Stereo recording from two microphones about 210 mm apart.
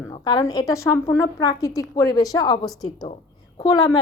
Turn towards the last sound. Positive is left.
turn(degrees=15)  # may be behind; listen again after turning